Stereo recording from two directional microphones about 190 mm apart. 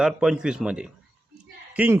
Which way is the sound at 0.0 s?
5° right (ahead or behind).